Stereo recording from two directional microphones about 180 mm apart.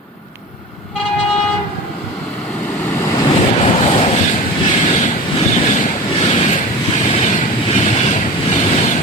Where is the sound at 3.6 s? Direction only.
35° left (ahead or behind).